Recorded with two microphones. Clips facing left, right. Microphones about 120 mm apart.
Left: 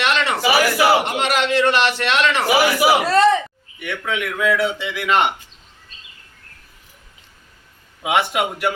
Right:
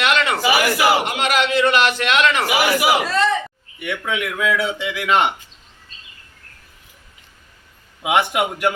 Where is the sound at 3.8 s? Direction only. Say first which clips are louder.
Right 1 dB; 5° right (ahead or behind).